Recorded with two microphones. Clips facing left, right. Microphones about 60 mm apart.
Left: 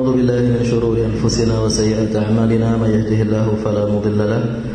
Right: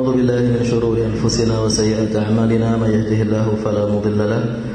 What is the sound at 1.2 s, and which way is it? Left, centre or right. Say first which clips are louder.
Speech: left 1 dB; right.